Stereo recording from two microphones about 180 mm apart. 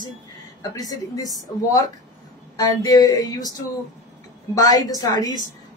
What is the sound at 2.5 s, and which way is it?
A woman's voice, 20° left (ahead or behind).